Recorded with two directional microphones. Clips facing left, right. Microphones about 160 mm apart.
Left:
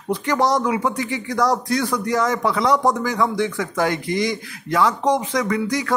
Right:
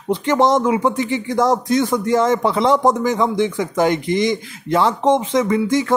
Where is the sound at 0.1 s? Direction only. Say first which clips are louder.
Right 4 dB; 25° right (ahead or behind).